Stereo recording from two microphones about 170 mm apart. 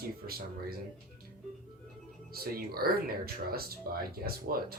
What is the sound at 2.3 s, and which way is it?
Speech, 60° right (ahead or behind).